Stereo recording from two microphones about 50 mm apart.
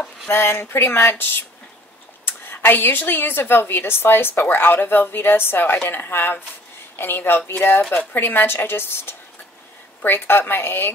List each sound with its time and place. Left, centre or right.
0.3 s a woman's voice: left
2.2 s a woman's voice: left